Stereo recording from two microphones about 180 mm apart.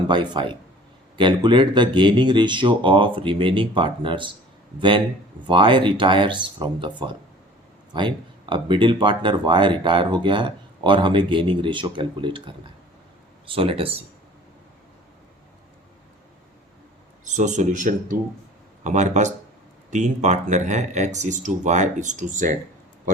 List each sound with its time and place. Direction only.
0.1 s speech: 25° right (ahead or behind)
17.2 s speech: 40° right (ahead or behind)